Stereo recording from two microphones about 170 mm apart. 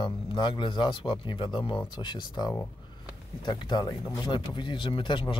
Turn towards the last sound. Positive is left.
turn(degrees=30)  # may be behind; listen again after turning